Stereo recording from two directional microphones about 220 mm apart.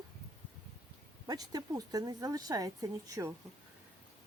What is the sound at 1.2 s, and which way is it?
Speech, 15° right (ahead or behind).